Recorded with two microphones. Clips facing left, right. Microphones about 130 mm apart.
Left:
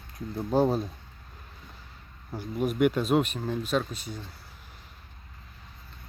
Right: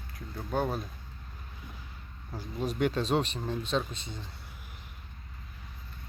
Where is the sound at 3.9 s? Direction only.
25° right (ahead or behind).